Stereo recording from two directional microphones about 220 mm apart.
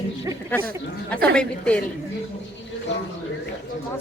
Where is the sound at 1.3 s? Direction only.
5° left (ahead or behind).